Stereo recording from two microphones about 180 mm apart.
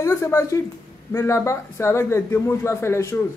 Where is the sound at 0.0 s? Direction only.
15° left (ahead or behind).